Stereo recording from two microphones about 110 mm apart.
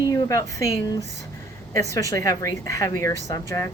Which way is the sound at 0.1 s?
30° left (ahead or behind).